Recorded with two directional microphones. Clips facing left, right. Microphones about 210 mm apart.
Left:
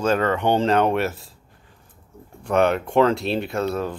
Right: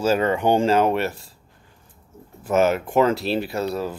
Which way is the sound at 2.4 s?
5° right (ahead or behind).